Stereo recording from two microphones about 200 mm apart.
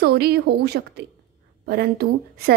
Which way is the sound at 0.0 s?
55° right (ahead or behind).